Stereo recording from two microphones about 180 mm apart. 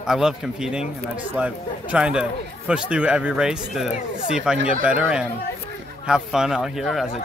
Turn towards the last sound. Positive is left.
turn(degrees=0)  # may be behind; listen again after turning